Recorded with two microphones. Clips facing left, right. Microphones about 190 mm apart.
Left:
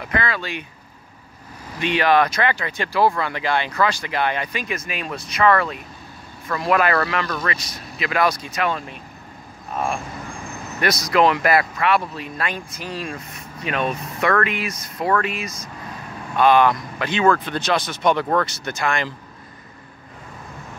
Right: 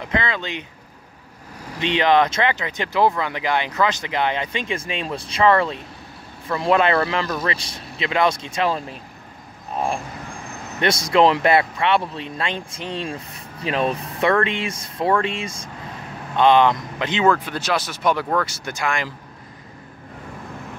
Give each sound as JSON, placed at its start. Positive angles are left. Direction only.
{"t": 0.0, "sound": "speech", "side_deg": -20}
{"t": 1.8, "sound": "speech", "side_deg": -20}
{"t": 10.8, "sound": "speech", "side_deg": -25}
{"t": 17.5, "sound": "speech", "side_deg": -5}